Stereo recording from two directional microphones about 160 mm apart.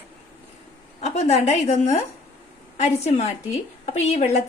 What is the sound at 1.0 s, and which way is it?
A woman's voice, 40° left (ahead or behind).